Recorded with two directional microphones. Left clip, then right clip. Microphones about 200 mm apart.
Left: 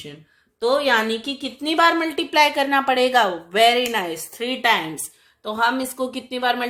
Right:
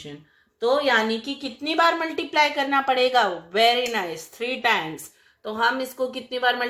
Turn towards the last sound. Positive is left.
turn(degrees=25)  # may be behind; listen again after turning